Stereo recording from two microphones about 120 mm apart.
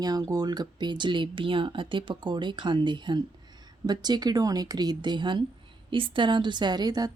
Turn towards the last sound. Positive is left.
turn(degrees=-35)  # may be behind; listen again after turning